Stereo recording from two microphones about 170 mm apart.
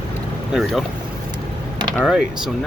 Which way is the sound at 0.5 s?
Centre (ahead or behind).